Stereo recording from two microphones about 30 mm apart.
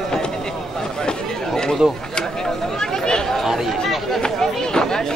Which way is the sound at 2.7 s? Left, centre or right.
Left.